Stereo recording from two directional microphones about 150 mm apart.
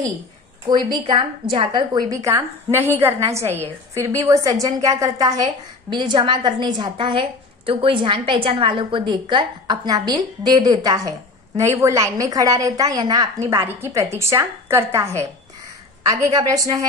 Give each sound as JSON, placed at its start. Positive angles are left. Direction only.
{"t": 0.7, "sound": "a woman's voice", "side_deg": -30}